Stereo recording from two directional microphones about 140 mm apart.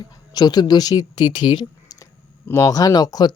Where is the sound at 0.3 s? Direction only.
30° left (ahead or behind).